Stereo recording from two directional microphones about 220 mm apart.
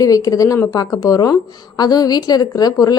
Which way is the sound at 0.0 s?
15° left (ahead or behind).